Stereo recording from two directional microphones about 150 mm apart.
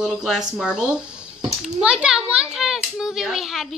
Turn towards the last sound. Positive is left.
turn(degrees=0)  # may be behind; listen again after turning